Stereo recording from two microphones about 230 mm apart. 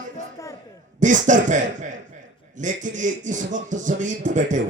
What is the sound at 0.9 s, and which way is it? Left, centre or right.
A man's voice, right.